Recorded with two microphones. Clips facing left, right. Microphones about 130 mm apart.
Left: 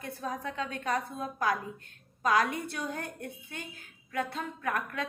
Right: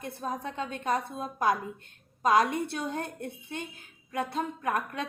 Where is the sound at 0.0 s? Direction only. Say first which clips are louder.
Right 1 dB; 20° right (ahead or behind).